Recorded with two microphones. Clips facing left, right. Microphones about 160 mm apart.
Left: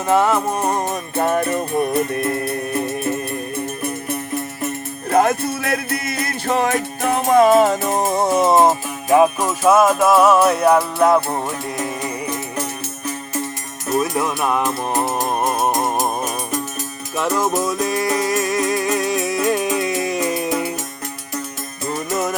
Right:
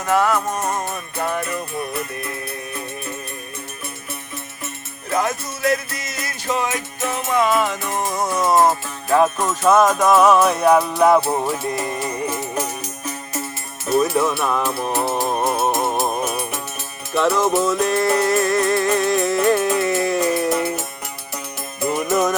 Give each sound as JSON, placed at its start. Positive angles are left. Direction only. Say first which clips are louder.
{"t": 0.1, "sound": "music", "louder": "left 2 dB", "side_deg": 25}
{"t": 1.2, "sound": "music", "louder": "left 5 dB", "side_deg": 40}
{"t": 5.1, "sound": "music", "louder": "left 6 dB", "side_deg": 55}
{"t": 7.2, "sound": "music", "louder": "left 7 dB", "side_deg": 40}
{"t": 14.0, "sound": "music", "louder": "right 1 dB", "side_deg": 10}
{"t": 17.2, "sound": "music", "louder": "right 2 dB", "side_deg": 10}